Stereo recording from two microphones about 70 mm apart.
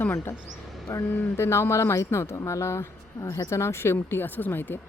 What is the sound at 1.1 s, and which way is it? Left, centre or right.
Speech, left.